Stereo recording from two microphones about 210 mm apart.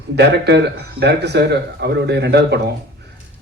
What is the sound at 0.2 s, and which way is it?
Speech, 55° right (ahead or behind).